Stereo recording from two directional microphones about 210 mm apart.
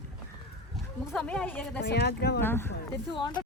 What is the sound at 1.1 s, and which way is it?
Speech, 5° left (ahead or behind).